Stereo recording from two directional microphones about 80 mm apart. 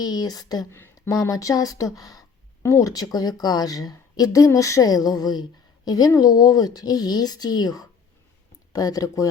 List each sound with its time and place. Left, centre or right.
0.0 s a woman's voice: left
0.7 s a sound: left
1.1 s a woman's voice: left